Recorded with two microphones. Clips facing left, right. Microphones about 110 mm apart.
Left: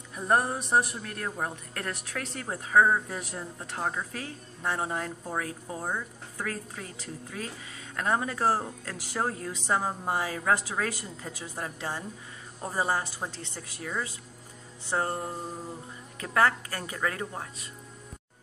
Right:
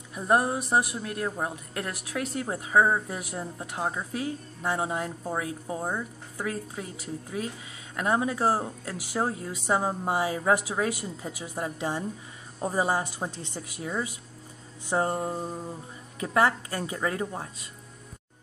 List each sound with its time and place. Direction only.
0.1 s speech: 10° right (ahead or behind)